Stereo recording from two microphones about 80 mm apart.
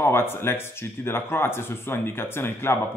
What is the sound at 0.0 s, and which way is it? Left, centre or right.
Speech, left.